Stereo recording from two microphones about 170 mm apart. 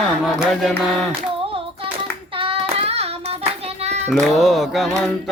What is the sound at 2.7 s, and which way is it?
Child singing, 35° right (ahead or behind).